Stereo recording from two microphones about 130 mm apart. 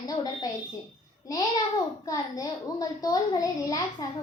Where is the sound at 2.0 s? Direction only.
30° left (ahead or behind).